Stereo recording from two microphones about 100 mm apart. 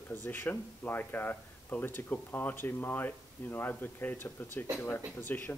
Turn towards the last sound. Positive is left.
turn(degrees=20)  # may be behind; listen again after turning